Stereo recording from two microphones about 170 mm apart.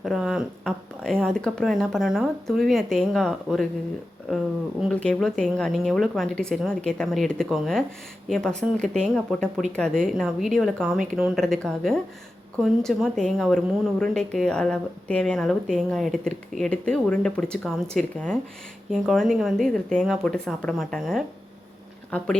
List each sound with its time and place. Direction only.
0.0 s speech: centre (ahead or behind)
4.8 s speech: 5° left (ahead or behind)